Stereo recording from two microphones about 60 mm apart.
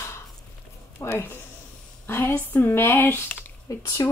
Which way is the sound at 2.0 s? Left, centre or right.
Left.